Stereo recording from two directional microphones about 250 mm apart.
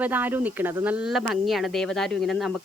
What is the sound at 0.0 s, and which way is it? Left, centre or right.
Speech, centre.